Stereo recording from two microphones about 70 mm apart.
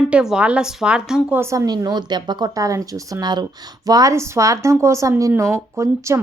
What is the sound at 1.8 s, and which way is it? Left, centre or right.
Speech, right.